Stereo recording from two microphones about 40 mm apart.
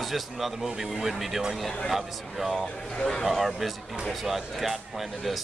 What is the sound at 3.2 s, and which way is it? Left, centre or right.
Speech, centre.